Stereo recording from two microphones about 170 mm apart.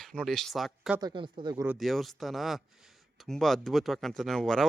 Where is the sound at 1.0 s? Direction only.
25° right (ahead or behind).